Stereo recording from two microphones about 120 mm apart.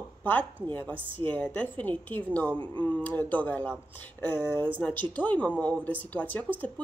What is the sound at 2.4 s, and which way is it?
Speech, 40° right (ahead or behind).